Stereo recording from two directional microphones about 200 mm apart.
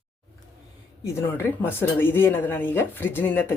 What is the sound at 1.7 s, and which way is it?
Speech, 10° left (ahead or behind).